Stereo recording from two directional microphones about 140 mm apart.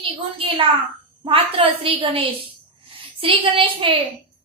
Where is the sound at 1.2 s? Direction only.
40° right (ahead or behind).